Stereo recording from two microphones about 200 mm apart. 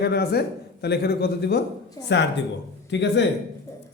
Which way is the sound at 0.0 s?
55° left (ahead or behind).